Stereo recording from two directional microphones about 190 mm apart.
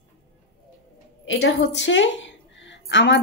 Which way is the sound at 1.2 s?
75° left (ahead or behind).